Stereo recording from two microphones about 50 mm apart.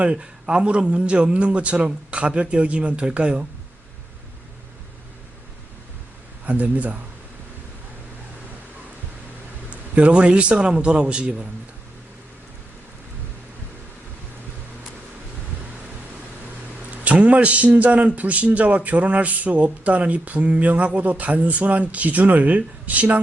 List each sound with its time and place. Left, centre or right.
0.0 s speech: right
6.4 s speech: right
9.6 s speech: right
17.0 s speech: right